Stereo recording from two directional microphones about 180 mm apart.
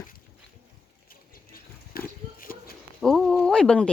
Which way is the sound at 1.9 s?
55° left (ahead or behind).